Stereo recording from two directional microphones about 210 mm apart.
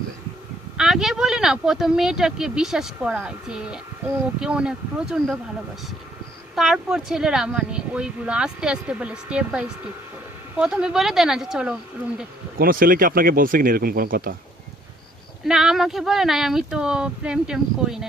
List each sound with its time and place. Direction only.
0.8 s speech: centre (ahead or behind)
6.6 s speech: 5° right (ahead or behind)
12.5 s speech: 45° right (ahead or behind)
15.4 s speech: centre (ahead or behind)